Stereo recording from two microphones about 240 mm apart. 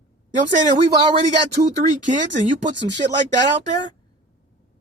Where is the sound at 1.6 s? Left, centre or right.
Right.